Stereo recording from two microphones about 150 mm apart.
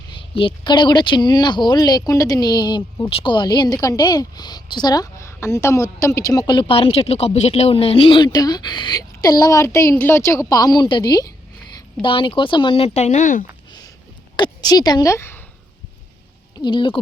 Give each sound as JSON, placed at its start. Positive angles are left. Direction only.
{"t": 0.2, "sound": "speech", "side_deg": 35}
{"t": 14.3, "sound": "a woman's voice", "side_deg": 30}
{"t": 16.6, "sound": "speech", "side_deg": 30}